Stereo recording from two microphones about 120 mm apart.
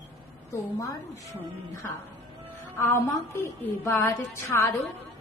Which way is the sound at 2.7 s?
20° left (ahead or behind).